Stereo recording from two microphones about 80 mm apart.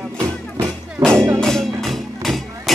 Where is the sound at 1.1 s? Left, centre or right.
Right.